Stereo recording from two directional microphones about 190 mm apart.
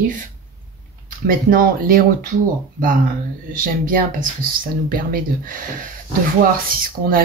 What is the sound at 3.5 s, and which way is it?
Speech, 45° right (ahead or behind).